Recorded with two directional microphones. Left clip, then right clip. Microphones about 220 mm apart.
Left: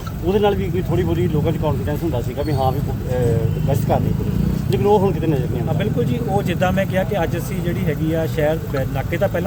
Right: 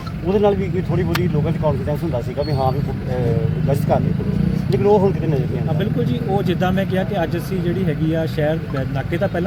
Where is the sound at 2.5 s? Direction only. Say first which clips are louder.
Left 1 dB; 40° right (ahead or behind).